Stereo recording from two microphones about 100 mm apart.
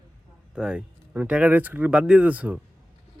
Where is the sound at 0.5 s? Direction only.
10° right (ahead or behind).